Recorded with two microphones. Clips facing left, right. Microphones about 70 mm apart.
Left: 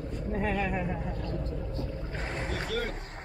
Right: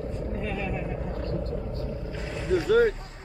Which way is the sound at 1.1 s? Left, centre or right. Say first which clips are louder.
Right 4 dB; right.